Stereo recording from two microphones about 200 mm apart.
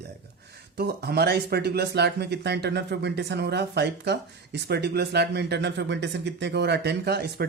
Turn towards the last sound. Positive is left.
turn(degrees=-55)  # may be behind; listen again after turning